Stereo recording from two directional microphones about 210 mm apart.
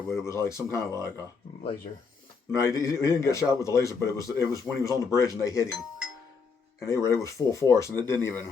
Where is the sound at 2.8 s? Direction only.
15° left (ahead or behind).